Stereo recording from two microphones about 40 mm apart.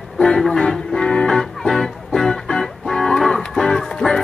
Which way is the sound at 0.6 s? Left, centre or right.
Centre.